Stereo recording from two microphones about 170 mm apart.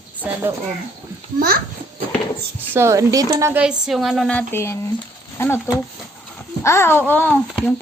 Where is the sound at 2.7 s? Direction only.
15° right (ahead or behind); by 4.4 s centre (ahead or behind).